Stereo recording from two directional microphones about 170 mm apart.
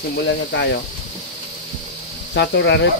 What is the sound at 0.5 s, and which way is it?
Speech, 90° left.